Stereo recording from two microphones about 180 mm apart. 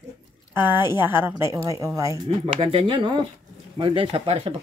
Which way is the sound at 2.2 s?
35° right (ahead or behind).